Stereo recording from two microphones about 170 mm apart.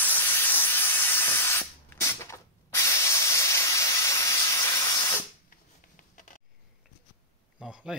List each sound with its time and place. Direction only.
0.0 s spray: 10° left (ahead or behind)
5.5 s a sound: 50° left (ahead or behind)
7.5 s speech: 5° right (ahead or behind)